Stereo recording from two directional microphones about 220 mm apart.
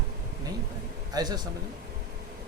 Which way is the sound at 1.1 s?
15° right (ahead or behind).